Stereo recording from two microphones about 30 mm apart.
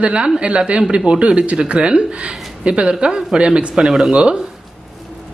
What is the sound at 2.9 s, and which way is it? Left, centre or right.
Speech, right.